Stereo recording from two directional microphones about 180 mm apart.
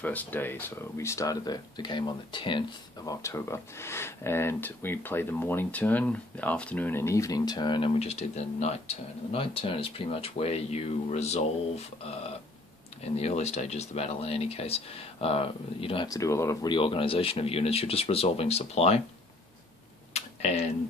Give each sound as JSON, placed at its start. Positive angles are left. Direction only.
{"t": 0.0, "sound": "speech", "side_deg": 10}
{"t": 16.7, "sound": "speech", "side_deg": 30}
{"t": 20.1, "sound": "a sound", "side_deg": 35}